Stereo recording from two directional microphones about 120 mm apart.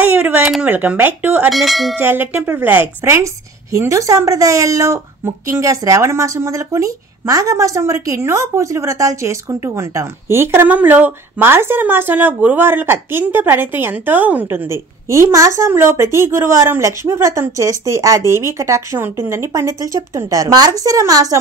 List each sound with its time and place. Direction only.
0.0 s a sound: 15° right (ahead or behind)
0.5 s a woman's voice: 10° right (ahead or behind)
1.5 s bell: centre (ahead or behind)
2.0 s a woman's voice: 15° right (ahead or behind)